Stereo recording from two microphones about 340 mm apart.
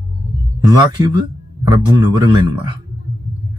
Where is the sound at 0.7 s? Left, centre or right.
Centre.